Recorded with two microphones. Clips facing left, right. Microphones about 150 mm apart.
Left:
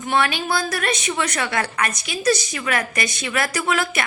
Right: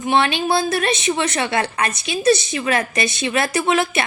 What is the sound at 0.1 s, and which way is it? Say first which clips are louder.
A woman's voice: right 3 dB; 25° right (ahead or behind).